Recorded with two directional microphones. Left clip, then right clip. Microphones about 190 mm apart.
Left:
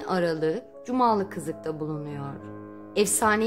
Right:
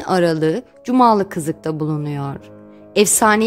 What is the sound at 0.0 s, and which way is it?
A woman's voice, 50° right (ahead or behind).